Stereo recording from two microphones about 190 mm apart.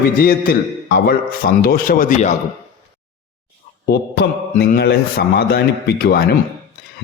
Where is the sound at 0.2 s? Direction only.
50° left (ahead or behind).